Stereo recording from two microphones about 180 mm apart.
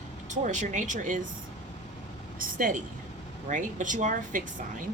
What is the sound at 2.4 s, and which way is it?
Speech, 50° right (ahead or behind).